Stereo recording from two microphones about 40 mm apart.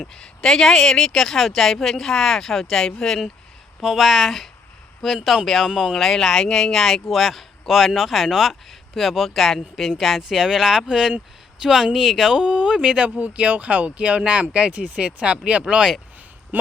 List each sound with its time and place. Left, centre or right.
0.1 s speech: centre
3.8 s speech: centre
7.1 s speech: centre
12.4 s speech: right
15.6 s speech: centre